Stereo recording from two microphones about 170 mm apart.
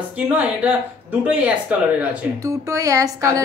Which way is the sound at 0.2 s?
10° right (ahead or behind).